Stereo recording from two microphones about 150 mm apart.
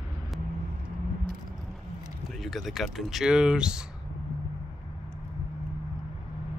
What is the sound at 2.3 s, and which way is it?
Speech, centre (ahead or behind).